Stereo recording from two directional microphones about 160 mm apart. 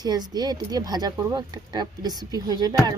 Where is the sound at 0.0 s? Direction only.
25° right (ahead or behind).